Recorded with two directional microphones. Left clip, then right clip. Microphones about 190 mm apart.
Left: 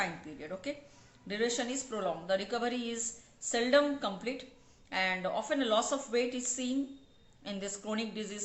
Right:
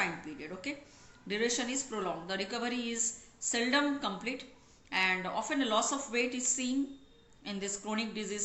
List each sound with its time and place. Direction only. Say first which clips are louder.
0.0 s speech: right 1 dB; 25° left (ahead or behind)